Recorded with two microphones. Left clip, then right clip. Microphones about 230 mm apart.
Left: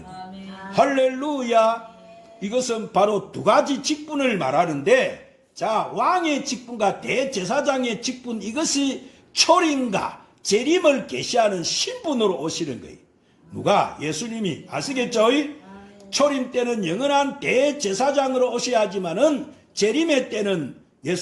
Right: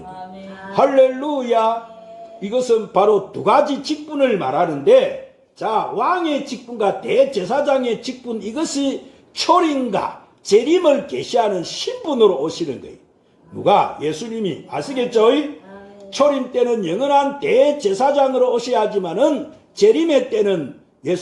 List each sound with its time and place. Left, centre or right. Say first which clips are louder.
0.7 s a man's voice: right 5 dB; left
13.7 s a man's voice: right 5 dB; left